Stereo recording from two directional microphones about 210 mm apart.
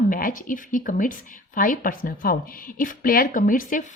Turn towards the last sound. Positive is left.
turn(degrees=40)  # may be behind; listen again after turning